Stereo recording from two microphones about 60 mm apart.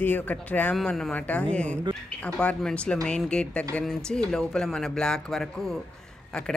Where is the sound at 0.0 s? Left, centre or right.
Left.